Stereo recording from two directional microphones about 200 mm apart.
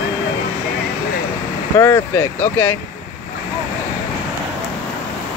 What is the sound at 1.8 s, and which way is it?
Speech, 15° left (ahead or behind).